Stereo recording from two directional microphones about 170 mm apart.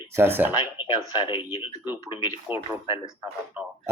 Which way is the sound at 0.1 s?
15° right (ahead or behind).